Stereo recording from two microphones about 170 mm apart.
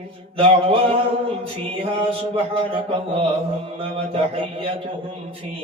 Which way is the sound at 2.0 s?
35° right (ahead or behind).